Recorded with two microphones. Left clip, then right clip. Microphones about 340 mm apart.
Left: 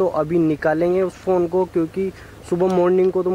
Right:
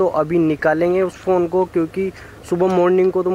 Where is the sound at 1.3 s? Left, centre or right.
Right.